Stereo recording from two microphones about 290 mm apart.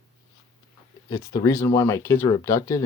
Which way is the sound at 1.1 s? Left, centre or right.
Centre.